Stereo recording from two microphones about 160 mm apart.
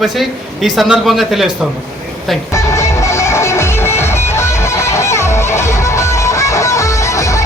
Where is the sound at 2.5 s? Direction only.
20° left (ahead or behind).